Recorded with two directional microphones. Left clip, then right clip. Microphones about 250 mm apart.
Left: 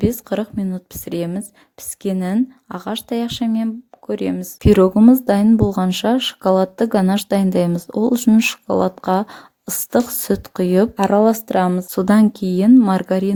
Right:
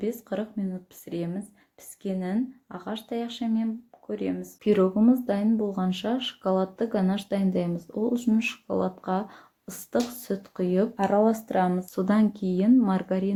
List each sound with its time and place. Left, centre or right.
0.0 s speech: left